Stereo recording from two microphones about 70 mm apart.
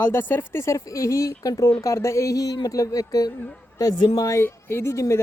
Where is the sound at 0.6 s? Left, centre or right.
Left.